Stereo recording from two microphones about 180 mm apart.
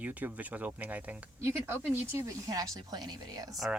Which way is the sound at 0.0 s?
10° right (ahead or behind).